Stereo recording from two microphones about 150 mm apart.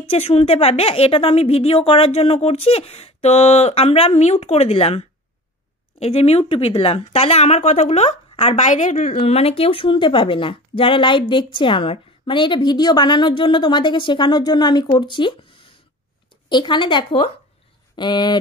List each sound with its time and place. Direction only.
0.0 s a woman's voice: 40° left (ahead or behind)
9.2 s speech: 40° left (ahead or behind)
16.4 s speech: 30° left (ahead or behind)